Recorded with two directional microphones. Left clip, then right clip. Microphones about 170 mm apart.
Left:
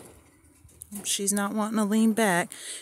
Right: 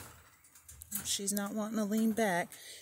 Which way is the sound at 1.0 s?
40° left (ahead or behind).